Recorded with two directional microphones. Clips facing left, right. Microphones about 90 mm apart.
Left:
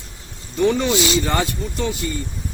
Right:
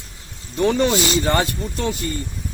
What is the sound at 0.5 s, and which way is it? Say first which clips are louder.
Speech: even; 45° right (ahead or behind).